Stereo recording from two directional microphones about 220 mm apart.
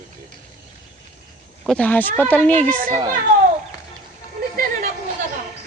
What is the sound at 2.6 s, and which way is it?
Speech, 40° right (ahead or behind).